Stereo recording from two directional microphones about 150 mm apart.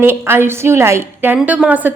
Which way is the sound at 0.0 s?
15° right (ahead or behind).